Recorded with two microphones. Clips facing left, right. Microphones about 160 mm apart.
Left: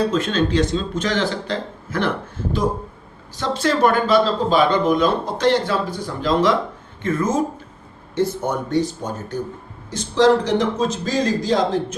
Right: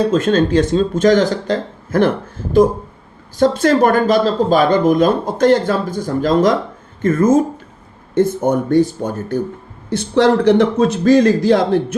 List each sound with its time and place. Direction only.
0.1 s speech: 45° right (ahead or behind)